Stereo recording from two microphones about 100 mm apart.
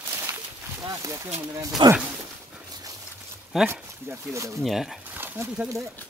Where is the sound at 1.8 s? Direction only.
55° right (ahead or behind).